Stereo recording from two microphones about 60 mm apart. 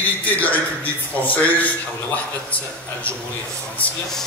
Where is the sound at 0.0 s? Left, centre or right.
Left.